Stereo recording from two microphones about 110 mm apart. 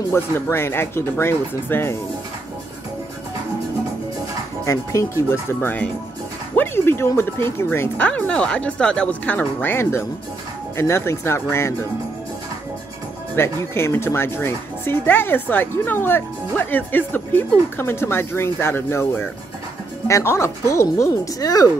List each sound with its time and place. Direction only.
0.1 s speech: 25° left (ahead or behind)
4.6 s speech: 25° left (ahead or behind)
8.1 s speech: 10° left (ahead or behind)
13.4 s speech: 20° left (ahead or behind)